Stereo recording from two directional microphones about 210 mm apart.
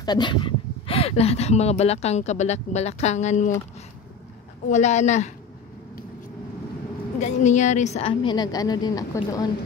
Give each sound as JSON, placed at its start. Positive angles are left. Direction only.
{"t": 0.0, "sound": "speech", "side_deg": 20}
{"t": 4.6, "sound": "speech", "side_deg": 35}
{"t": 7.2, "sound": "a woman's voice", "side_deg": 35}